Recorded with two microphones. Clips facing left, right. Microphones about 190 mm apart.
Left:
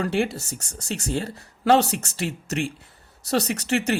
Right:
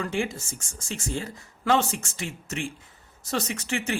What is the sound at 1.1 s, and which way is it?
Speech, 35° left (ahead or behind).